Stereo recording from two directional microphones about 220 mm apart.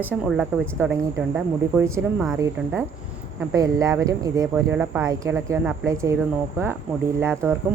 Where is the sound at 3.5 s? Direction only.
15° right (ahead or behind).